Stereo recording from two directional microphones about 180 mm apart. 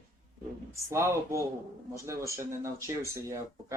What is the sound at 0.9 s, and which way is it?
Speech, 15° right (ahead or behind).